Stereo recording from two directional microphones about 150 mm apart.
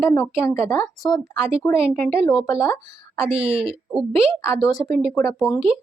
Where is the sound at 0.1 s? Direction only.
15° left (ahead or behind).